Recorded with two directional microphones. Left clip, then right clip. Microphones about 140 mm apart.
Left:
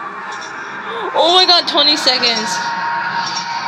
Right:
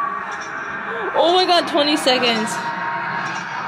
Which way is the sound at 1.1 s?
10° right (ahead or behind).